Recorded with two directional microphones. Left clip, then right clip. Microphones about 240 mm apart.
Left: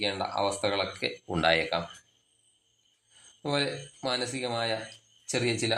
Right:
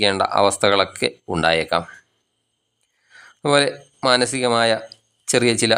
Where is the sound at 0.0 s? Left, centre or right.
Right.